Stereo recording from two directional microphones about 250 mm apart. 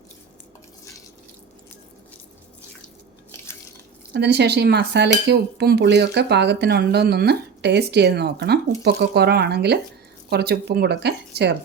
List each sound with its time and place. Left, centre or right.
4.1 s speech: right